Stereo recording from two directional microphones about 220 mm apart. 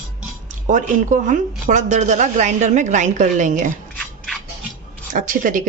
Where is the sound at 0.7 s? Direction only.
35° right (ahead or behind).